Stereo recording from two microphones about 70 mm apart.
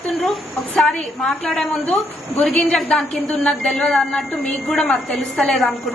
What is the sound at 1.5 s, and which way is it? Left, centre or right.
A woman's voice, centre.